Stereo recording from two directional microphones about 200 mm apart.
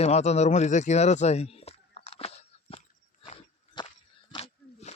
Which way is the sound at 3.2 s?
25° left (ahead or behind).